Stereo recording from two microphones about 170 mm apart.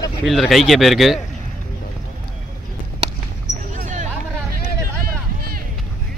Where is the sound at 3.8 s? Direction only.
45° right (ahead or behind).